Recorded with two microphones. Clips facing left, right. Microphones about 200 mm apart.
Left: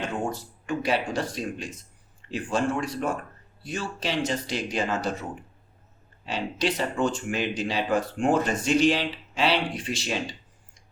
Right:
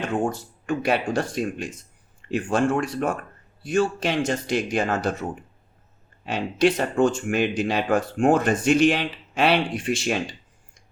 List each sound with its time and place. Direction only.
0.3 s speech: 50° right (ahead or behind)
6.2 s speech: 50° right (ahead or behind)